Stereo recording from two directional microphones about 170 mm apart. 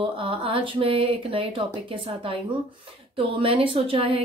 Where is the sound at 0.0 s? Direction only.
30° right (ahead or behind).